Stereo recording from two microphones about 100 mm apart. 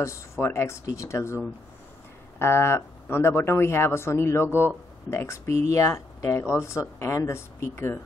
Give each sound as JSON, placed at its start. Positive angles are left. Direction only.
{"t": 0.0, "sound": "speech", "side_deg": 30}